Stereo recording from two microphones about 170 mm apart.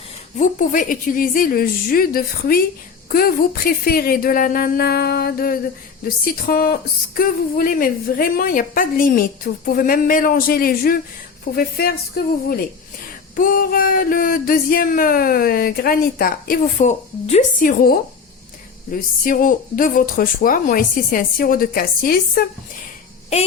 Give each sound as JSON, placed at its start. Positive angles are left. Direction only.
{"t": 0.3, "sound": "speech", "side_deg": 50}
{"t": 17.6, "sound": "speech", "side_deg": 55}
{"t": 23.3, "sound": "child singing", "side_deg": 35}